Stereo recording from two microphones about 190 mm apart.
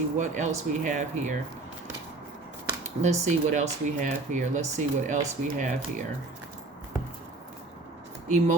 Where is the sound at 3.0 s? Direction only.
40° right (ahead or behind).